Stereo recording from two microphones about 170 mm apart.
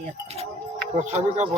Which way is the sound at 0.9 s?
45° right (ahead or behind).